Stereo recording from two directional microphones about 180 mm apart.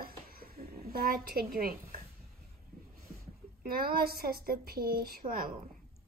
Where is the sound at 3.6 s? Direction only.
55° right (ahead or behind).